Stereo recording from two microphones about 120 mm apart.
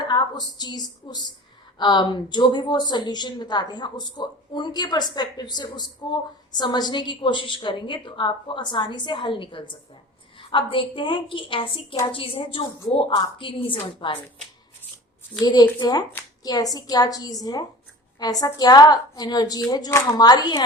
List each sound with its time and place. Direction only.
0.0 s a woman's voice: 40° left (ahead or behind)
15.4 s a woman's voice: 35° left (ahead or behind)